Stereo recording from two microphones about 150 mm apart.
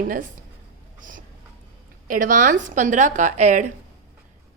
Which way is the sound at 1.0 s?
65° right (ahead or behind).